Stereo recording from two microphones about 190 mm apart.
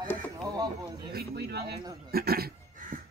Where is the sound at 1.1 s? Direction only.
55° right (ahead or behind).